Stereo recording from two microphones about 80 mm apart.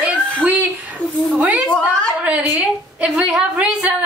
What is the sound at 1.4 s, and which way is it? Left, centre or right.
A woman's voice, centre.